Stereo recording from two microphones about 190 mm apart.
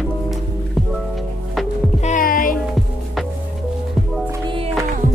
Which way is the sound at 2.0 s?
40° left (ahead or behind).